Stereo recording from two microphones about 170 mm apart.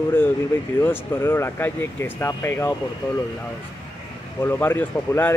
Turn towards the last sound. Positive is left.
turn(degrees=15)  # may be behind; listen again after turning